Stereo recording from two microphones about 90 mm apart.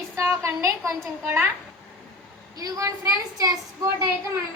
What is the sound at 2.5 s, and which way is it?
Speech, 45° right (ahead or behind).